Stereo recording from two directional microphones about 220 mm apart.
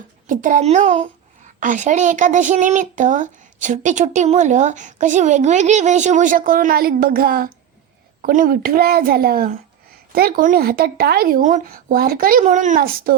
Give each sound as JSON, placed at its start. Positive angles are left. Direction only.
{"t": 0.3, "sound": "a woman's voice", "side_deg": -35}